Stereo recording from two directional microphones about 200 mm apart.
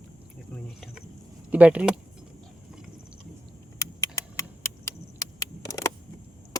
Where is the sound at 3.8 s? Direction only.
15° left (ahead or behind).